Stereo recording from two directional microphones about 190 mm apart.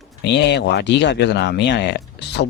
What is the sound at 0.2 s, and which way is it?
Speech, 65° left (ahead or behind).